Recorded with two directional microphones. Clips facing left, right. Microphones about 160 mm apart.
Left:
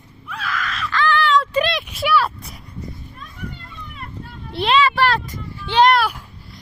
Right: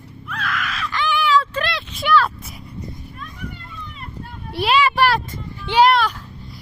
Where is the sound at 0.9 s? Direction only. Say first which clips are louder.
Left 3 dB; 15° right (ahead or behind).